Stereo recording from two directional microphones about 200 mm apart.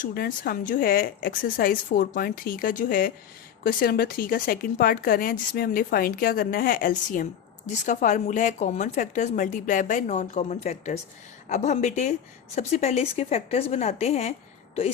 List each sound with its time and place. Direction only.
0.0 s a woman's voice: 45° left (ahead or behind)